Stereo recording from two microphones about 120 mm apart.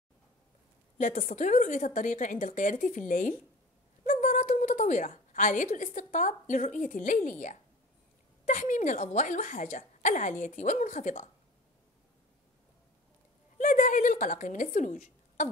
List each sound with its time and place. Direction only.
0.9 s a woman's voice: 90° left
13.6 s speech: 90° left